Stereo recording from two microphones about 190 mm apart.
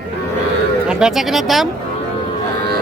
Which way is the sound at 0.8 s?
Centre (ahead or behind).